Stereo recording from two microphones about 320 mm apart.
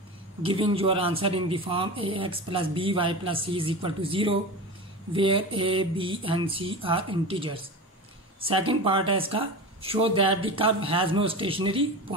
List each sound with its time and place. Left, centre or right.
0.4 s speech: centre